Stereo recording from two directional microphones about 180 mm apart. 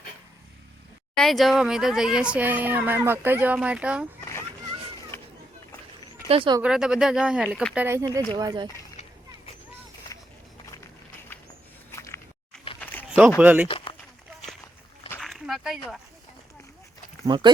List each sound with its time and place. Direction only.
1.1 s speech: centre (ahead or behind)
5.1 s a sound: 15° left (ahead or behind)
6.2 s speech: 30° right (ahead or behind)
6.6 s speech: 5° right (ahead or behind)
7.9 s speech: 15° right (ahead or behind)
11.9 s biting: 15° left (ahead or behind)
12.8 s a sound: 10° left (ahead or behind)
13.1 s a sound: 5° right (ahead or behind)
13.4 s speech: 10° right (ahead or behind)
13.7 s speech: 30° left (ahead or behind)
15.2 s a sound: centre (ahead or behind)
17.2 s speech: 25° right (ahead or behind)